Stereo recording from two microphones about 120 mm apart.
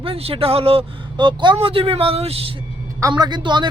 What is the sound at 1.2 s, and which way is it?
Speech, 40° right (ahead or behind).